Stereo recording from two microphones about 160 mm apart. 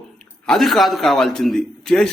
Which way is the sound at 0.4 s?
Centre (ahead or behind).